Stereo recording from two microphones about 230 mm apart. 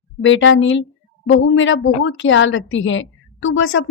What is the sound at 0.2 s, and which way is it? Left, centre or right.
A woman's voice, left.